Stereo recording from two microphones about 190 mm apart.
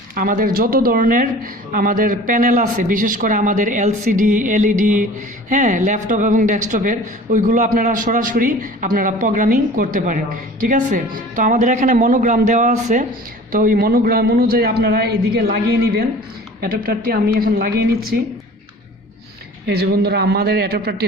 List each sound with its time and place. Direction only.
0.1 s a man's voice: 45° right (ahead or behind)
19.6 s a man's voice: 55° right (ahead or behind)